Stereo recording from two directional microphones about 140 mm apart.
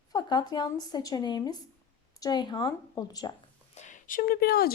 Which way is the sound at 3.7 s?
60° left (ahead or behind).